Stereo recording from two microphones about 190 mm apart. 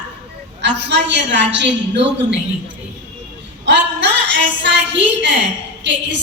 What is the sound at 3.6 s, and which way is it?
A woman's voice, 65° right (ahead or behind).